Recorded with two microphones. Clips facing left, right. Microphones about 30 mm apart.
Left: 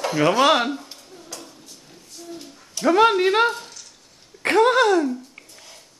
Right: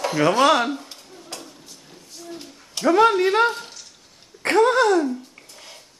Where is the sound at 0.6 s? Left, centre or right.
Centre.